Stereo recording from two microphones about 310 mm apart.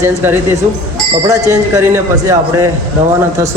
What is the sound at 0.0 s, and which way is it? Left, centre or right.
Speech, centre.